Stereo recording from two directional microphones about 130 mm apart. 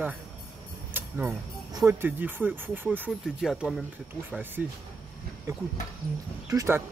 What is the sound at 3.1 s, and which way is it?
Speech, centre (ahead or behind).